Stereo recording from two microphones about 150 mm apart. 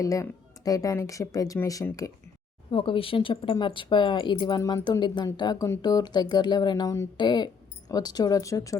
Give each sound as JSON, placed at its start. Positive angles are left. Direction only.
{"t": 0.0, "sound": "speech", "side_deg": 20}
{"t": 2.6, "sound": "speech", "side_deg": 35}